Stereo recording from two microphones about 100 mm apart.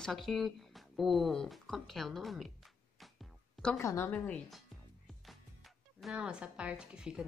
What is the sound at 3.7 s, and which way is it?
Speech, 25° left (ahead or behind).